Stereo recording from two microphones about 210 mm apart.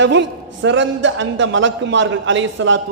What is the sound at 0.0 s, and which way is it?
A man's voice, 60° right (ahead or behind).